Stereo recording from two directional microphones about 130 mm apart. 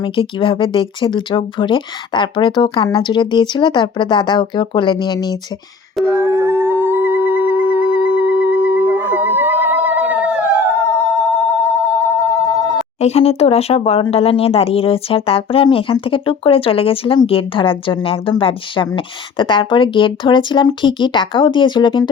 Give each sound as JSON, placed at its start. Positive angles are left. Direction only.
{"t": 0.0, "sound": "speech", "side_deg": 40}
{"t": 6.2, "sound": "howl", "side_deg": -20}
{"t": 10.9, "sound": "telephone bell ringing", "side_deg": 15}
{"t": 13.0, "sound": "speech", "side_deg": 50}